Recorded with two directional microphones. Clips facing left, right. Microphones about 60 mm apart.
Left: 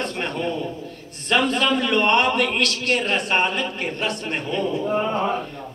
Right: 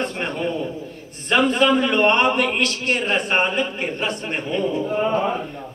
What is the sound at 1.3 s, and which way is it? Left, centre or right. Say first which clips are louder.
A man's voice: right 3 dB; centre.